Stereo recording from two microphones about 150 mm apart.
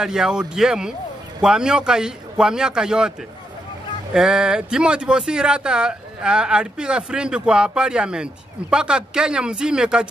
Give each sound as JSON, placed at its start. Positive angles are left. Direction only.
{"t": 0.0, "sound": "speech", "side_deg": -5}
{"t": 4.1, "sound": "speech", "side_deg": -5}